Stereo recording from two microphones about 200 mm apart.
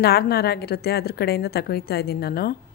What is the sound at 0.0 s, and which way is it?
A woman's voice, 50° left (ahead or behind).